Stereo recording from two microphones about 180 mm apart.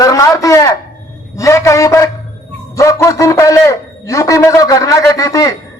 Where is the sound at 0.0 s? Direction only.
20° left (ahead or behind).